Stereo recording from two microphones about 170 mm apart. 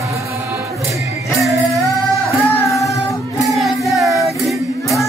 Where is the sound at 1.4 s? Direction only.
Centre (ahead or behind).